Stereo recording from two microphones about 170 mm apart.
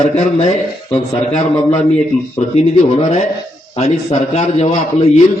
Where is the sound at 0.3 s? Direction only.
40° left (ahead or behind).